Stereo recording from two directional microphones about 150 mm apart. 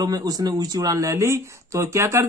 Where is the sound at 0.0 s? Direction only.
25° right (ahead or behind).